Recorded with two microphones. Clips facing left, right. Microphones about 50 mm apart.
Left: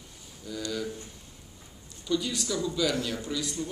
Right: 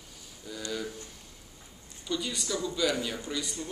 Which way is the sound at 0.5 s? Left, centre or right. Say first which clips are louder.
Left 4 dB; centre.